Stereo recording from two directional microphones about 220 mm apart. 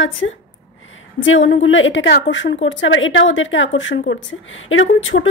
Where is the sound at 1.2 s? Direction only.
60° left (ahead or behind).